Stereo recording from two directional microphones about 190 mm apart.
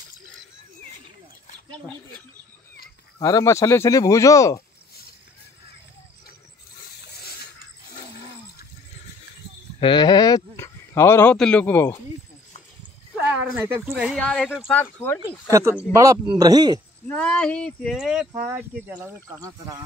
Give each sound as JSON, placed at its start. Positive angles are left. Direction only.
{"t": 3.2, "sound": "speech", "side_deg": 15}
{"t": 9.8, "sound": "speech", "side_deg": 25}
{"t": 13.3, "sound": "speech", "side_deg": -10}
{"t": 14.0, "sound": "speech", "side_deg": 5}
{"t": 15.5, "sound": "speech", "side_deg": -15}
{"t": 17.1, "sound": "speech", "side_deg": 5}